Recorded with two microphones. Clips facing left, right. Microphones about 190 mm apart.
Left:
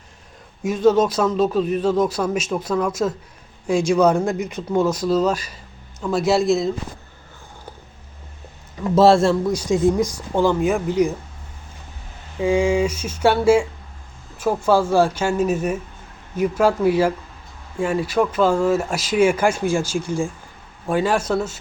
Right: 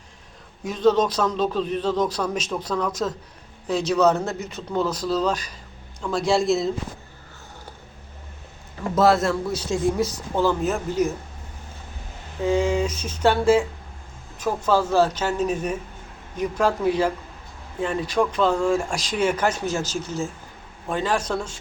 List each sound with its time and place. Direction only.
0.6 s a man's voice: 10° left (ahead or behind)
9.0 s a man's voice: 30° left (ahead or behind)
9.5 s a man's voice: 15° left (ahead or behind)
12.4 s a man's voice: 10° left (ahead or behind)